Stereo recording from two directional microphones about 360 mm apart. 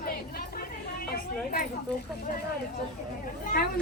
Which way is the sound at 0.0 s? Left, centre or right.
Left.